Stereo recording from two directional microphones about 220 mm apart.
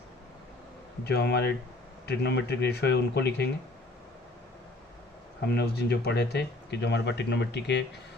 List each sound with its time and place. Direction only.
1.0 s speech: 50° left (ahead or behind)
5.4 s speech: 50° left (ahead or behind)